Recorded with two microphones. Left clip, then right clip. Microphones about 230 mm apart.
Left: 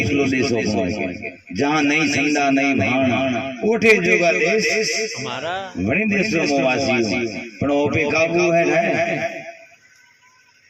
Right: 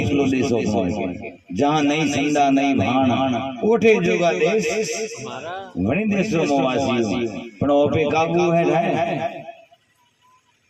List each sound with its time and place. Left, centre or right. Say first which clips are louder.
0.0 s a man's voice: left 1 dB; right
5.2 s speech: left 5 dB; left
5.9 s a man's voice: left 3 dB; right